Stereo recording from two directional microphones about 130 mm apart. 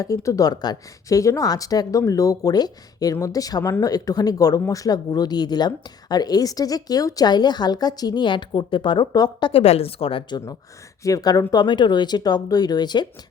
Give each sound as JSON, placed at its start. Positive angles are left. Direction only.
{"t": 0.0, "sound": "speech", "side_deg": 25}
{"t": 9.5, "sound": "a woman's voice", "side_deg": 50}
{"t": 11.0, "sound": "speech", "side_deg": 30}